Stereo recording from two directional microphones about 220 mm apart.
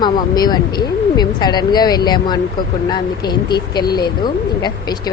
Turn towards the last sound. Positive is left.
turn(degrees=20)  # may be behind; listen again after turning